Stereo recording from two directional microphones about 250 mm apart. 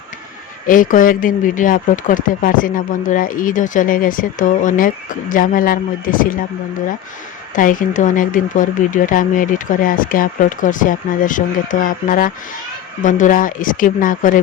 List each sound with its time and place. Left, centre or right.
0.7 s speech: left
7.5 s speech: left